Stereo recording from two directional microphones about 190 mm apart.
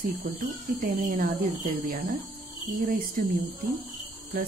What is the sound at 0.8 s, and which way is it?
Speech, 45° right (ahead or behind).